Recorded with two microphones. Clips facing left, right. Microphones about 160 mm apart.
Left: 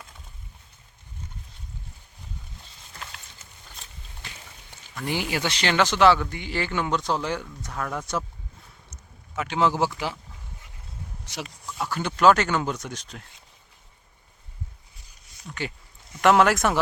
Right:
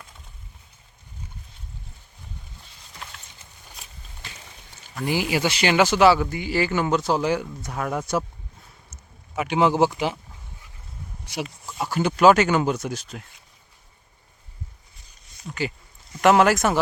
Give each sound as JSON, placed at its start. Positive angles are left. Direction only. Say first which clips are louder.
{"t": 4.9, "sound": "speech", "louder": "right 4 dB", "side_deg": -5}
{"t": 11.3, "sound": "speech", "louder": "right 5 dB", "side_deg": -10}
{"t": 15.4, "sound": "a sound", "louder": "right 4 dB", "side_deg": -5}
{"t": 16.2, "sound": "speech", "louder": "right 2 dB", "side_deg": 0}